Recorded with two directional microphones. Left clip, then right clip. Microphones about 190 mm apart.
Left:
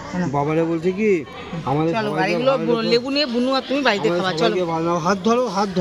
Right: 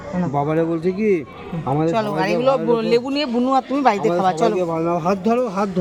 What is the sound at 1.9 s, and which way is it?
A man's voice, 60° right (ahead or behind).